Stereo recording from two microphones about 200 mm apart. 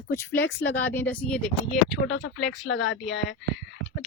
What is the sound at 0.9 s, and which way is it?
Speech, 10° left (ahead or behind).